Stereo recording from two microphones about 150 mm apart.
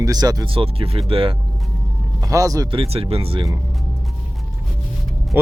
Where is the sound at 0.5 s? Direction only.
40° right (ahead or behind).